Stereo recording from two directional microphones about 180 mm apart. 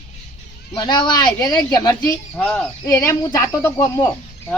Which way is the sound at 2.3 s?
5° left (ahead or behind).